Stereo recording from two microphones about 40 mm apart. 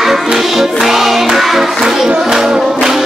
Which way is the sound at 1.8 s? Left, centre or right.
Centre.